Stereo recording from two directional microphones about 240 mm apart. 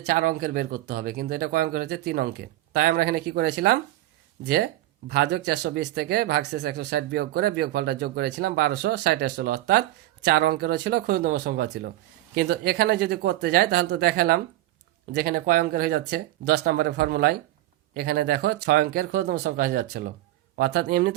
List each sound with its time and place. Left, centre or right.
0.0 s speech: right
5.0 s speech: right